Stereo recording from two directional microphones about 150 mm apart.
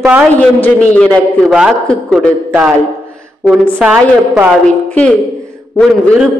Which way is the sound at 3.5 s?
5° right (ahead or behind).